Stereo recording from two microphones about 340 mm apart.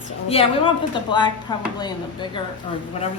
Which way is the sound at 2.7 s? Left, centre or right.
Centre.